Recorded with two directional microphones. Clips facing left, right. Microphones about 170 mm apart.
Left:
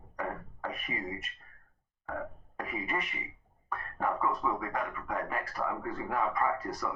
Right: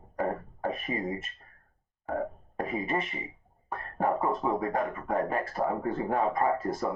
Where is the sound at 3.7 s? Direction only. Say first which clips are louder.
Right 4 dB; 30° right (ahead or behind).